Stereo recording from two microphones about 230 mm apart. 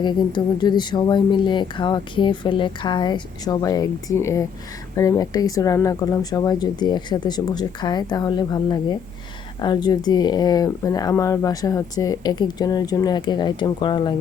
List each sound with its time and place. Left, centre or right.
0.0 s speech: centre